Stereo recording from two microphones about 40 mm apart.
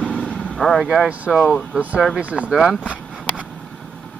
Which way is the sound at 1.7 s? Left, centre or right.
Right.